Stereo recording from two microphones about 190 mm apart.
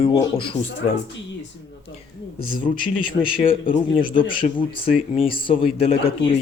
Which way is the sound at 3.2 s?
25° left (ahead or behind).